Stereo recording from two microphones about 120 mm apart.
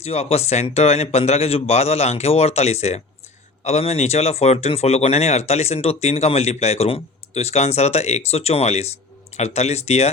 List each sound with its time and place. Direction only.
0.0 s speech: 60° left (ahead or behind)